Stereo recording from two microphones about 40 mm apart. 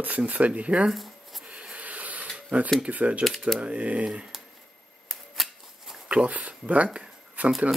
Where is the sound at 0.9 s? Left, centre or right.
Centre.